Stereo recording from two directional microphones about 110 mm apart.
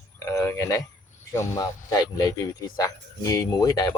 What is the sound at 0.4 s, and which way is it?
Speech, 25° left (ahead or behind).